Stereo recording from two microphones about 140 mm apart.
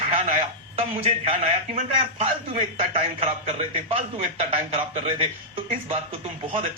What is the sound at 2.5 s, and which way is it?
A man's voice, 45° right (ahead or behind).